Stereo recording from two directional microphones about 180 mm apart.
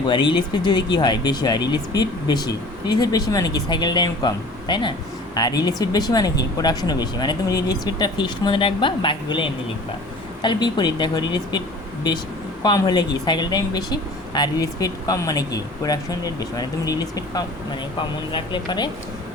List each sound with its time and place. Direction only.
0.1 s speech: 25° left (ahead or behind)
12.6 s speech: 25° left (ahead or behind)